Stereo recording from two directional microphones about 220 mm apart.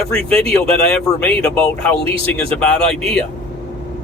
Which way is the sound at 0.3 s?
25° right (ahead or behind).